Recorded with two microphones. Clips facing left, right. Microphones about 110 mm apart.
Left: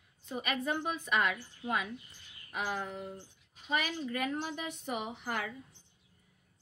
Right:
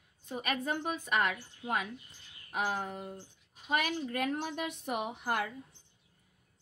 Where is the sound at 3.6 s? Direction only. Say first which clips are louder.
Right 2 dB; 55° right (ahead or behind).